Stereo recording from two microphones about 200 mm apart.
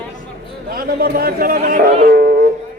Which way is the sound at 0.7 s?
45° right (ahead or behind).